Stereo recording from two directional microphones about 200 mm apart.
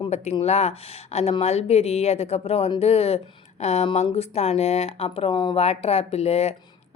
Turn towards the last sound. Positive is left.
turn(degrees=30)  # may be behind; listen again after turning